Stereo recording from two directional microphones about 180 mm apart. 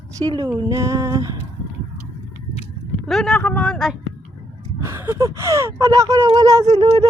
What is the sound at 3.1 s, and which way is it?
Speech, centre (ahead or behind).